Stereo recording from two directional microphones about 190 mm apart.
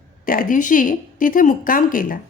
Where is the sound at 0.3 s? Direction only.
45° left (ahead or behind).